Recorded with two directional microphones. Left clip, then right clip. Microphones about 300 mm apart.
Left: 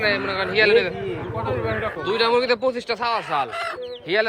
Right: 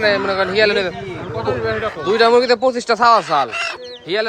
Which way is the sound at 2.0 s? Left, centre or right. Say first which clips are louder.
Right 7 dB; centre.